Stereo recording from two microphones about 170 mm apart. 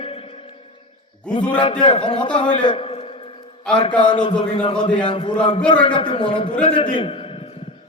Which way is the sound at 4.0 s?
25° left (ahead or behind).